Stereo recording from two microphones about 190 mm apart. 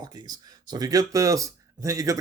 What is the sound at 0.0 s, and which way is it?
A man's voice, 20° right (ahead or behind).